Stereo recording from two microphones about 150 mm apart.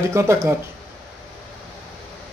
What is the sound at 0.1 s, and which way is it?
Speech, 20° right (ahead or behind).